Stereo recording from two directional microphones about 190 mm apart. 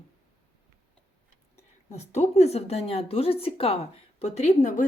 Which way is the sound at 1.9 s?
35° left (ahead or behind).